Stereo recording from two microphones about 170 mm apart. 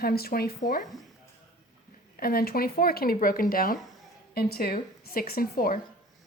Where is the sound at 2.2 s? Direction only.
60° left (ahead or behind).